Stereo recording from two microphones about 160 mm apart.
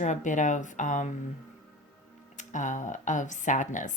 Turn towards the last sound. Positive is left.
turn(degrees=50)  # may be behind; listen again after turning